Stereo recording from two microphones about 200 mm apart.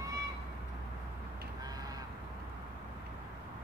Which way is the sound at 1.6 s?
20° right (ahead or behind).